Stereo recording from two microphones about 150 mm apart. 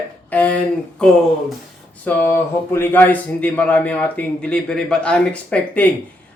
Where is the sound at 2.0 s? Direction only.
15° left (ahead or behind).